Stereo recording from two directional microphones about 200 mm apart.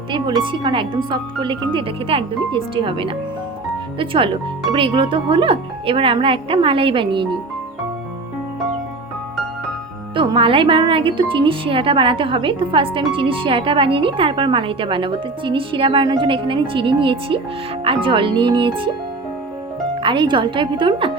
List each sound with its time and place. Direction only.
0.1 s a woman's voice: 25° right (ahead or behind)
10.2 s a woman's voice: 25° right (ahead or behind)
20.0 s a woman's voice: 25° right (ahead or behind)